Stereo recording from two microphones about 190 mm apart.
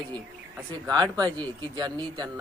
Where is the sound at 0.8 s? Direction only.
20° right (ahead or behind).